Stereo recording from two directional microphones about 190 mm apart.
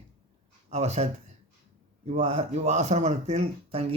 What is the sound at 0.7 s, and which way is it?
Speech, 35° right (ahead or behind).